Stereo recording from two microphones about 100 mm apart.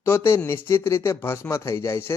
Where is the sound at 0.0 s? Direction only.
25° left (ahead or behind).